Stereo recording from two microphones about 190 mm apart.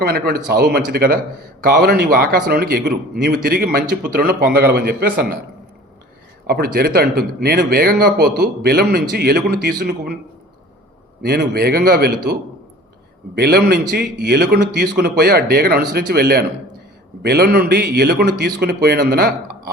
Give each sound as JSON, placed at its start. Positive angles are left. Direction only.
{"t": 0.0, "sound": "a man's voice", "side_deg": -55}
{"t": 6.5, "sound": "speech", "side_deg": -55}
{"t": 11.2, "sound": "speech", "side_deg": -55}
{"t": 13.3, "sound": "speech", "side_deg": -55}